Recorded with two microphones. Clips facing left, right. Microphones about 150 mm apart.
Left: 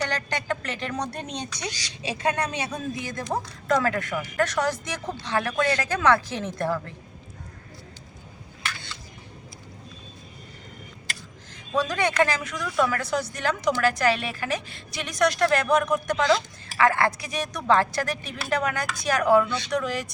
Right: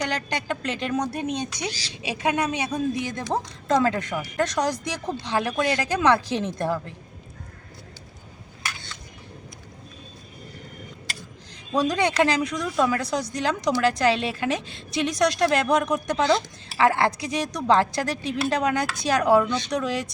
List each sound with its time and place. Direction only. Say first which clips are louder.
0.0 s speech: right 1 dB; 15° right (ahead or behind)
11.7 s speech: right 2 dB; 15° right (ahead or behind)